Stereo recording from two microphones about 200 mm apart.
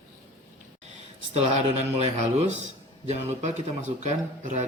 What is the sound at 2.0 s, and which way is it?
Speech, 35° right (ahead or behind).